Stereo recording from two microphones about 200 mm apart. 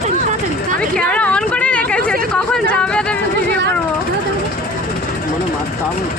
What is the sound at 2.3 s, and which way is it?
Music, 5° left (ahead or behind).